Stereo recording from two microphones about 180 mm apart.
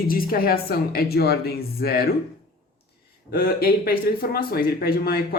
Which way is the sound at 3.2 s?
60° left (ahead or behind).